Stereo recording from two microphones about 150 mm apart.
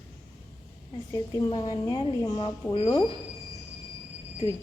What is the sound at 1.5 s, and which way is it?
A woman's voice, 30° left (ahead or behind).